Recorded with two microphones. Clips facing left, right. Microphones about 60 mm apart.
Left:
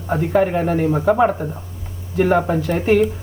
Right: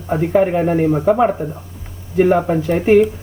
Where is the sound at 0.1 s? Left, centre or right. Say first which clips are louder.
Right 2 dB; centre.